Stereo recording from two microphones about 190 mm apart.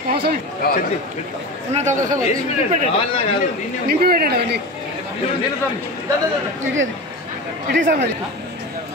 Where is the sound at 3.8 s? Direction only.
55° right (ahead or behind).